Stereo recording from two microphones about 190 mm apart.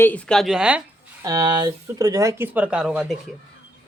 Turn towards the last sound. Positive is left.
turn(degrees=-5)  # may be behind; listen again after turning